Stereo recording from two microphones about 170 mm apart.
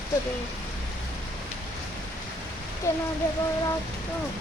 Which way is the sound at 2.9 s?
20° left (ahead or behind).